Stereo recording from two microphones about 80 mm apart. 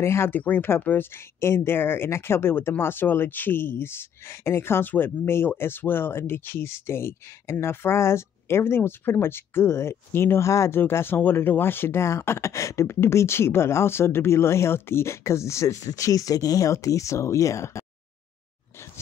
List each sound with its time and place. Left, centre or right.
0.0 s speech: left
0.3 s speech: left